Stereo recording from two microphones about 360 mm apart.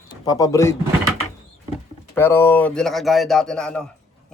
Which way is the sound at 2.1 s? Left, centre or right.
Centre.